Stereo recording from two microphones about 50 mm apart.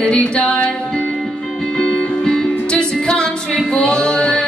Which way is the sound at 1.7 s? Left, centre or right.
Centre.